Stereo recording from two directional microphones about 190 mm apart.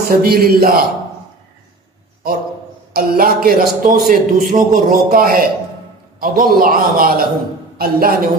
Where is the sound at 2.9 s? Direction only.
50° right (ahead or behind).